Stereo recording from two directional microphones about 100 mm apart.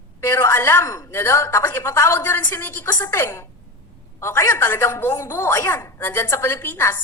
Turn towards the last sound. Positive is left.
turn(degrees=20)  # may be behind; listen again after turning